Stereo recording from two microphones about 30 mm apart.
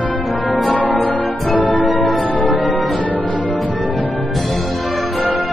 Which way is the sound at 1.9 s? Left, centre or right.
Centre.